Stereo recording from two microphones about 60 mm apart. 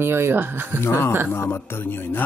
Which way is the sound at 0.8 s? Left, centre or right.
Left.